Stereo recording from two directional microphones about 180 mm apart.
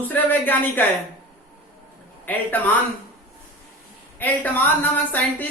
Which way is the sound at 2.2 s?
10° left (ahead or behind).